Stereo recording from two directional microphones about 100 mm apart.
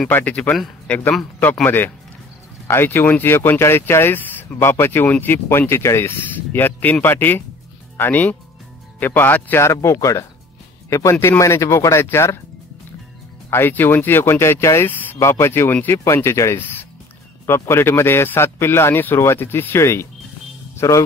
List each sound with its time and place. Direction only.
0.1 s speech: 15° left (ahead or behind)
13.5 s a man's voice: 25° left (ahead or behind)